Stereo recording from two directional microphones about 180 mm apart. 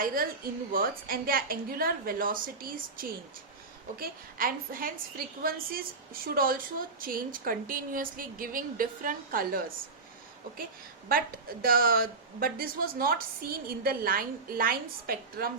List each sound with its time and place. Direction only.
0.0 s a woman's voice: 50° right (ahead or behind)
11.6 s a woman's voice: 55° right (ahead or behind)